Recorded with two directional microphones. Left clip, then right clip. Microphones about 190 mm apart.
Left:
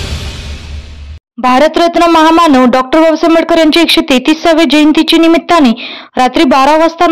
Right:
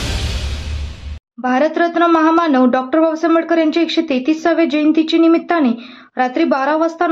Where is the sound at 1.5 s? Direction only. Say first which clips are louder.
Left 8 dB; 35° left (ahead or behind).